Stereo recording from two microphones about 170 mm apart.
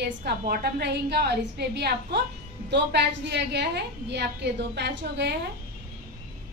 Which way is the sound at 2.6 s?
90° right.